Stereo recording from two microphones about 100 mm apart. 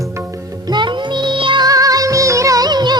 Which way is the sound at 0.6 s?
50° right (ahead or behind).